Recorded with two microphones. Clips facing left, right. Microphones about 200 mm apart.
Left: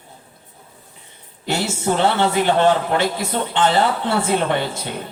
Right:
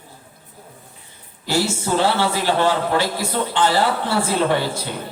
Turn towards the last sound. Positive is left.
turn(degrees=20)  # may be behind; listen again after turning